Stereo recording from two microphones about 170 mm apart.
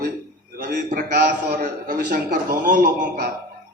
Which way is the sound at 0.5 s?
60° right (ahead or behind).